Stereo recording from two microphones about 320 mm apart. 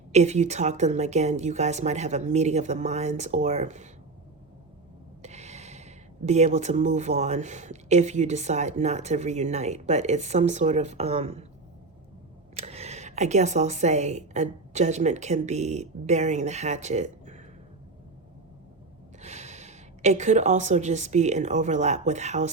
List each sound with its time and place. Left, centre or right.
0.1 s speech: right
5.2 s speech: right
12.5 s speech: centre
19.2 s speech: right